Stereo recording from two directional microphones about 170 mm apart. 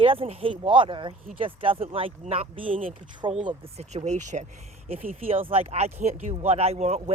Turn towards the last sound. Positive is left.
turn(degrees=-40)  # may be behind; listen again after turning